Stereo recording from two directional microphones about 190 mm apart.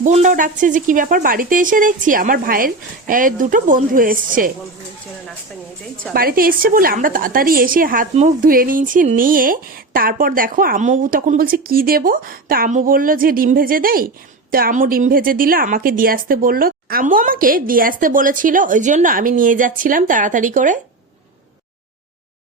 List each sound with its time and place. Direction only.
0.0 s speech: 40° right (ahead or behind)
6.1 s speech: 50° right (ahead or behind)